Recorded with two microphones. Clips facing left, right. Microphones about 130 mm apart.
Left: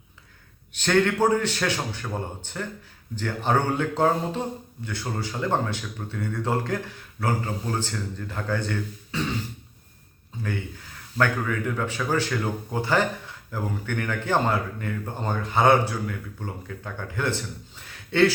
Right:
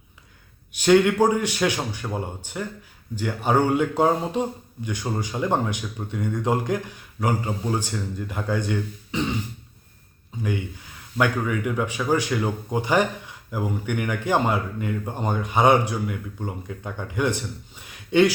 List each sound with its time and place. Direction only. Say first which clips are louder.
0.7 s speech: right 5 dB; 10° right (ahead or behind)
11.2 s speech: right 2 dB; 15° right (ahead or behind)